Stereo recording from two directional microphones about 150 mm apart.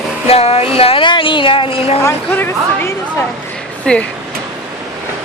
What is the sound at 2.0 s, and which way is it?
Speech, 15° left (ahead or behind).